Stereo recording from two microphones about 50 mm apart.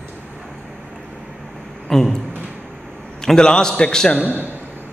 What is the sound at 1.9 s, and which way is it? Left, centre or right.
A man's voice, centre.